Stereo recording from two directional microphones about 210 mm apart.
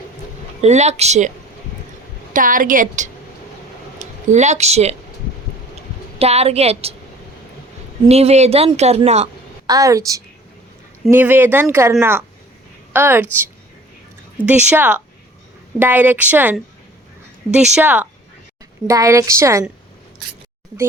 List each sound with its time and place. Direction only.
0.6 s a woman's voice: 30° right (ahead or behind)
2.3 s a woman's voice: 40° right (ahead or behind)
6.1 s a woman's voice: 30° right (ahead or behind)
8.0 s a woman's voice: 30° right (ahead or behind)
9.6 s speech: 15° right (ahead or behind)